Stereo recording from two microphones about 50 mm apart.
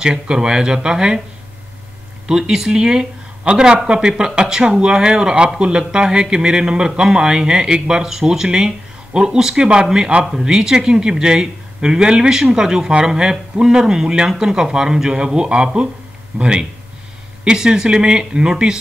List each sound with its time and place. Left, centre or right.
0.0 s speech: centre
2.2 s speech: centre